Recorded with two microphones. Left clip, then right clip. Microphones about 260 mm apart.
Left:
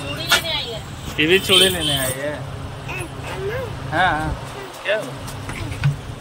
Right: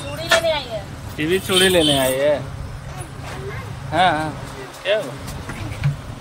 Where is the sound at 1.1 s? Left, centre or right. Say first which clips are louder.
Left 4 dB; centre.